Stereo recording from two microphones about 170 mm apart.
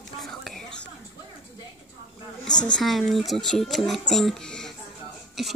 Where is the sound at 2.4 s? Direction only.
25° left (ahead or behind).